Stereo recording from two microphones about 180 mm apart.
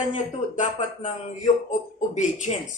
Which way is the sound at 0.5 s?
45° left (ahead or behind).